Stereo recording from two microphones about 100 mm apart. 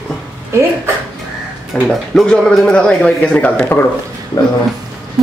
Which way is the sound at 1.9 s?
5° left (ahead or behind).